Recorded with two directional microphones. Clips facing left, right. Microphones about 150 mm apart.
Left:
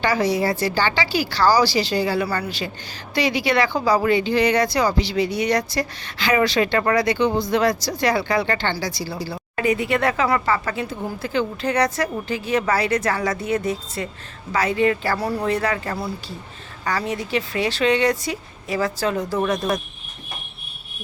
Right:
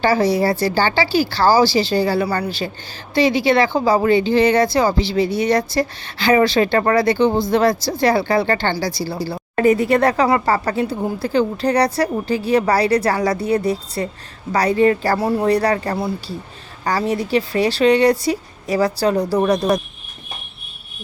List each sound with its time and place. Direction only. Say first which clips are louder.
0.0 s a woman's voice: right 4 dB; 30° right (ahead or behind)
15.2 s a woman's voice: right 5 dB; 25° right (ahead or behind)